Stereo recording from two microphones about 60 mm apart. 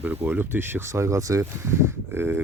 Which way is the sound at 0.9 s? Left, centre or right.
Right.